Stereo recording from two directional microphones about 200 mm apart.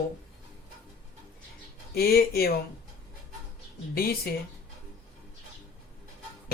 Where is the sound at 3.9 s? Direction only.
50° left (ahead or behind).